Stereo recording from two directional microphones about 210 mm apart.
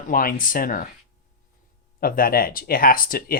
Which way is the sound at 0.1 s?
40° left (ahead or behind).